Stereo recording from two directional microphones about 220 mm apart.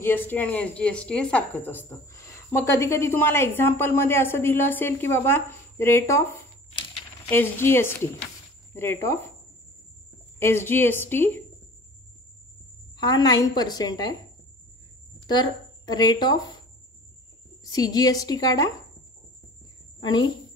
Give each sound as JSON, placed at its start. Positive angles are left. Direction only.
{"t": 0.0, "sound": "a woman's voice", "side_deg": 10}
{"t": 7.2, "sound": "a woman's voice", "side_deg": 10}
{"t": 10.4, "sound": "a woman's voice", "side_deg": 10}
{"t": 12.9, "sound": "a woman's voice", "side_deg": 15}
{"t": 15.2, "sound": "a woman's voice", "side_deg": 20}
{"t": 17.6, "sound": "a woman's voice", "side_deg": 15}
{"t": 20.0, "sound": "speech", "side_deg": 20}